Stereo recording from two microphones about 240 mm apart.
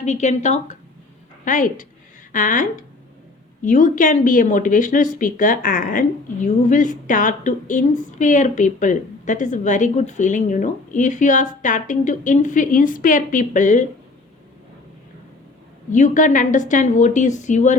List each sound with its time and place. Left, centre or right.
0.0 s a woman's voice: left
15.9 s speech: left